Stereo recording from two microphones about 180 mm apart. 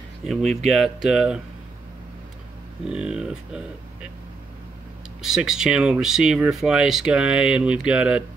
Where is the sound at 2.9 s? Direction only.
5° right (ahead or behind).